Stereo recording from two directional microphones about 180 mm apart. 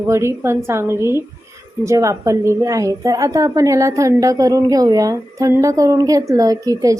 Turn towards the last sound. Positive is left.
turn(degrees=-20)  # may be behind; listen again after turning